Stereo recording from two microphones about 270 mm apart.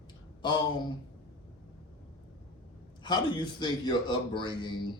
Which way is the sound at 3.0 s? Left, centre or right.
Centre.